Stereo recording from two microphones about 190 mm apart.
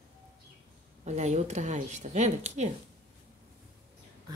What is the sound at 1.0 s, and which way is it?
Speech, 35° right (ahead or behind).